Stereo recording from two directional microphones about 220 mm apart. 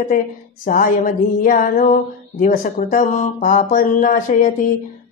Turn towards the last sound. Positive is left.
turn(degrees=35)  # may be behind; listen again after turning